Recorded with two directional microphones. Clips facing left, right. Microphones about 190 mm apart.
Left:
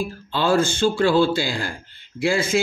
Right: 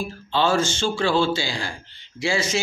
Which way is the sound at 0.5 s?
55° left (ahead or behind).